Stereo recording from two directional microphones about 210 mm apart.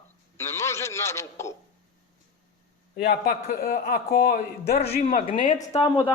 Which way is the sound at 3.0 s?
50° left (ahead or behind).